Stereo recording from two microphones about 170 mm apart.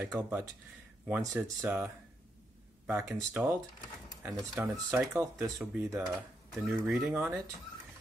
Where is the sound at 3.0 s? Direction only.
5° right (ahead or behind).